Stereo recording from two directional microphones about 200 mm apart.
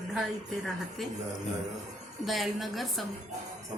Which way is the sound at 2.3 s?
Centre (ahead or behind).